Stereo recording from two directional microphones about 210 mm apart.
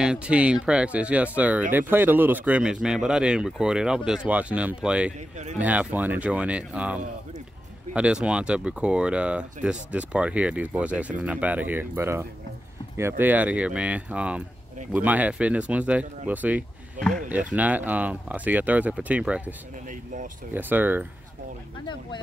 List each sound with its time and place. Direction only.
0.0 s speech: 5° right (ahead or behind)
17.0 s speech: 35° right (ahead or behind)
17.3 s speech: 5° right (ahead or behind)
20.5 s speech: 10° right (ahead or behind)